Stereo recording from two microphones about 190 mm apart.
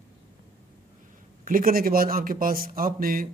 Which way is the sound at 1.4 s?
50° right (ahead or behind).